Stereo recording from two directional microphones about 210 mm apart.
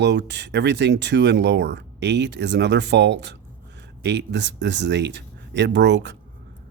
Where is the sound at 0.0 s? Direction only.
55° right (ahead or behind).